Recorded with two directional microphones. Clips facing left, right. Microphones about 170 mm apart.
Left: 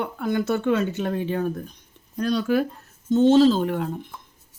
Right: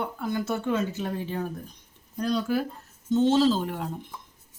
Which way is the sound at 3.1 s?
55° left (ahead or behind).